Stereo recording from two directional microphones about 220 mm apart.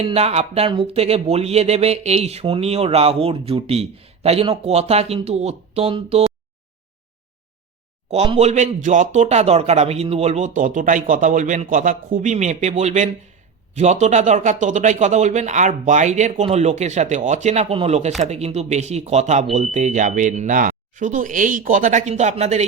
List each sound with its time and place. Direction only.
0.0 s speech: 25° right (ahead or behind)
8.1 s a man's voice: 30° right (ahead or behind)